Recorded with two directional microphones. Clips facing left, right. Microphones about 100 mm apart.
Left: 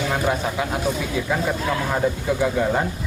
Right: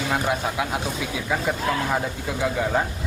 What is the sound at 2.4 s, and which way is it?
Speech, centre (ahead or behind).